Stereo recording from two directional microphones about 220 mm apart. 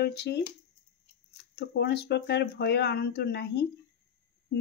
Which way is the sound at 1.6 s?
50° left (ahead or behind).